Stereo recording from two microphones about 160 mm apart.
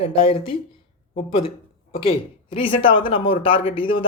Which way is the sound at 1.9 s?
35° left (ahead or behind).